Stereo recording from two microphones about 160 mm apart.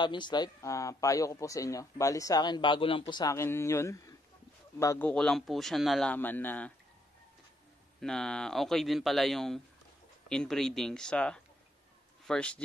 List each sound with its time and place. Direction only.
0.0 s a man's voice: 30° left (ahead or behind); by 6.7 s 10° left (ahead or behind)
8.0 s speech: 5° left (ahead or behind)